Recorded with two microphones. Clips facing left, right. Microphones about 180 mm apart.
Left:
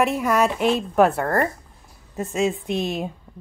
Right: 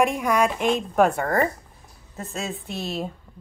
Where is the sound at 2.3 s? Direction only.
15° left (ahead or behind).